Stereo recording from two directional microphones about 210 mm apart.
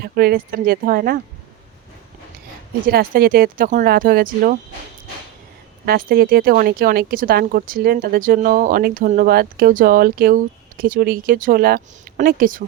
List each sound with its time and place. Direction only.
0.0 s speech: 45° right (ahead or behind)
2.8 s speech: 45° right (ahead or behind)
5.8 s speech: 45° right (ahead or behind)